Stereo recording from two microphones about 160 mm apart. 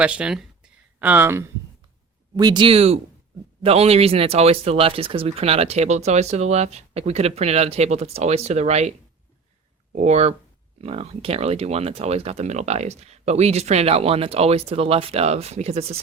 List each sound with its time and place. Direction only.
0.0 s speech: 5° right (ahead or behind)
2.3 s speech: 25° right (ahead or behind); by 8.9 s 45° right (ahead or behind)
9.9 s speech: 45° right (ahead or behind)